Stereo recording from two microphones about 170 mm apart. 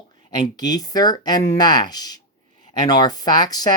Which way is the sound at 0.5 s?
25° left (ahead or behind).